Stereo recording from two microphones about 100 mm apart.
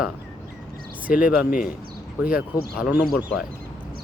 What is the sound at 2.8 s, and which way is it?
Speech, 15° right (ahead or behind).